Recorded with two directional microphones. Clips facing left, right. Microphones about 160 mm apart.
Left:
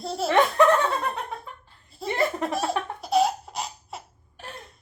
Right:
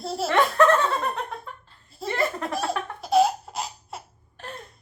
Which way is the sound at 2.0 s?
20° left (ahead or behind).